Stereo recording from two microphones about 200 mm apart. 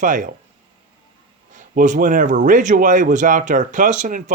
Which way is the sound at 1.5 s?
40° right (ahead or behind).